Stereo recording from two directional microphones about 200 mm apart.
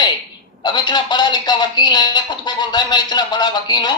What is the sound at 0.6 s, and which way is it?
Speech, 25° left (ahead or behind).